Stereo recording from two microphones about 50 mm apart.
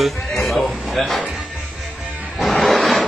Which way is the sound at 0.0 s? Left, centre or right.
Centre.